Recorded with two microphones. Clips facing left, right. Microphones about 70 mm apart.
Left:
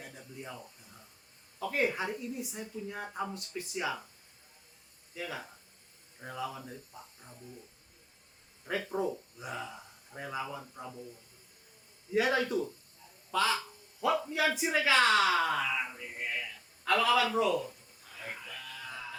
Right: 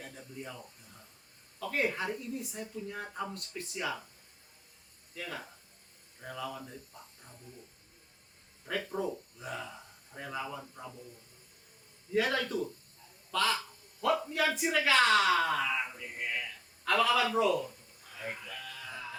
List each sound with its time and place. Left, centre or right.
0.0 s a sound: centre
1.6 s a woman's voice: centre
5.1 s a woman's voice: centre
8.6 s a woman's voice: centre
12.1 s a woman's voice: centre
18.1 s music: centre